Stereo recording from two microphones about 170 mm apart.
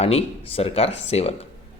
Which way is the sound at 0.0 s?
35° left (ahead or behind).